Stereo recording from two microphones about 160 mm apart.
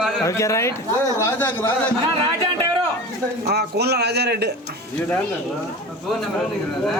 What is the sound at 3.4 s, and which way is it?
Speech, 90° right.